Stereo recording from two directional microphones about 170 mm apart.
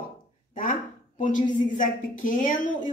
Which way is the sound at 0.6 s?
50° left (ahead or behind).